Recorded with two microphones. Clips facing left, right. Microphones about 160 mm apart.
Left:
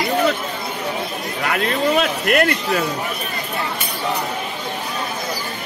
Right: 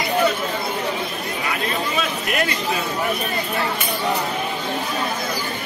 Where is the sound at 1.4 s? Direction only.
65° left (ahead or behind).